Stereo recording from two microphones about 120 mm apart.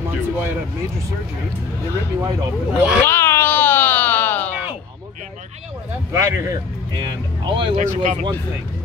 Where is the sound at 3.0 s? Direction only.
20° left (ahead or behind).